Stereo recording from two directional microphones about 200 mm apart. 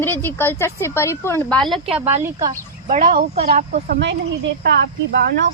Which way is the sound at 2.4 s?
35° right (ahead or behind).